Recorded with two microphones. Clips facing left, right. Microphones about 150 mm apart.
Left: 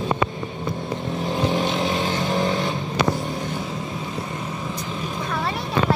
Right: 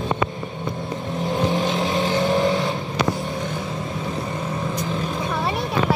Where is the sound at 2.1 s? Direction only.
20° right (ahead or behind).